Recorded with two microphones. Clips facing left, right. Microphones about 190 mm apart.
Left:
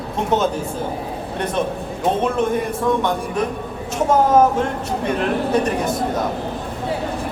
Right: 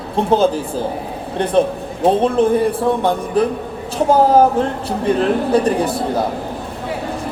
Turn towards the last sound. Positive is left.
turn(degrees=-30)  # may be behind; listen again after turning